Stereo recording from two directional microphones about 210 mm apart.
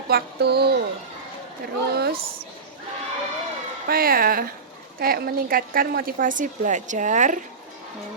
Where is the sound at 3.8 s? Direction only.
45° right (ahead or behind).